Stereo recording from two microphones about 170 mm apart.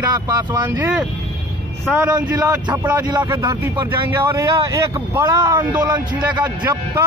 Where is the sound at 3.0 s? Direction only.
25° right (ahead or behind).